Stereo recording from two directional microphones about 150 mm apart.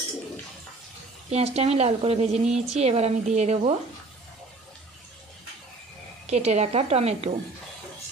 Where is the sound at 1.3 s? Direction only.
45° right (ahead or behind).